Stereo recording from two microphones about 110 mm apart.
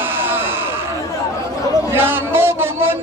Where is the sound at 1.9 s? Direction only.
20° right (ahead or behind).